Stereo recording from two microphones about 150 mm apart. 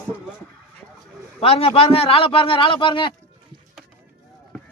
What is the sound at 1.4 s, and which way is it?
A man's voice, 40° left (ahead or behind).